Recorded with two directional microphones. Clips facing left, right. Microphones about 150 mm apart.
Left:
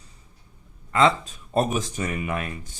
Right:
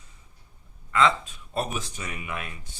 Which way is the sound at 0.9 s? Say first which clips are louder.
Left 3 dB; 35° left (ahead or behind).